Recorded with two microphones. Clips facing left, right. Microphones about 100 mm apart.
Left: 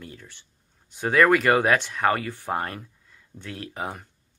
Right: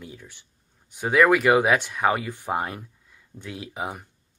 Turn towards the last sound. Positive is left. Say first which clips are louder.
# right 1 dB
turn(degrees=-10)  # may be behind; listen again after turning